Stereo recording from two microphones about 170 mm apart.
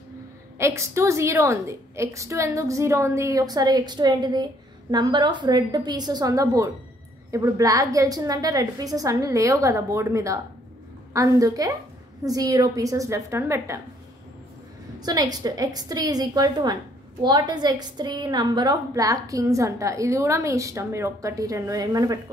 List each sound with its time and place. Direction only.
0.6 s a woman's voice: 15° right (ahead or behind)
15.0 s a woman's voice: 25° right (ahead or behind)